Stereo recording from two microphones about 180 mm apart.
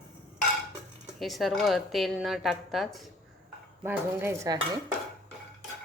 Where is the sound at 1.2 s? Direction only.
Centre (ahead or behind).